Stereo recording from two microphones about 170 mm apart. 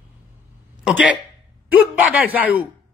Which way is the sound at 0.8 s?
5° right (ahead or behind).